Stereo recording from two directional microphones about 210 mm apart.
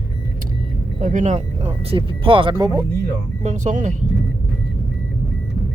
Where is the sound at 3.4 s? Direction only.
35° right (ahead or behind).